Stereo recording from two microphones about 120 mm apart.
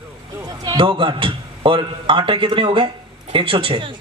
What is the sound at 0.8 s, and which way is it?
A man's voice, 45° right (ahead or behind).